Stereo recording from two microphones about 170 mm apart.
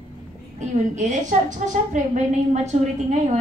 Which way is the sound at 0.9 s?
45° right (ahead or behind).